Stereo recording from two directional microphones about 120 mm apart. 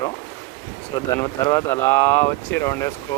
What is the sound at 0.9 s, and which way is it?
Speech, 30° left (ahead or behind).